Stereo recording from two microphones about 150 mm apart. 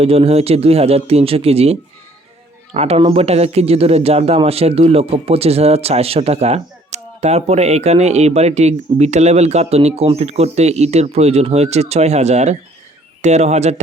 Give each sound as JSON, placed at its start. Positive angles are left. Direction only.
{"t": 0.0, "sound": "speech", "side_deg": -40}